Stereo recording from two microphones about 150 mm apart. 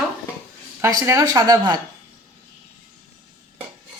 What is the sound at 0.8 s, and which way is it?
Speech, 20° right (ahead or behind).